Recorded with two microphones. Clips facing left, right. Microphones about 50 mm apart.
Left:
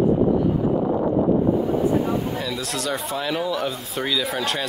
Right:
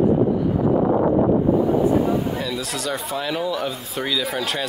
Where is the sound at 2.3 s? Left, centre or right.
Centre.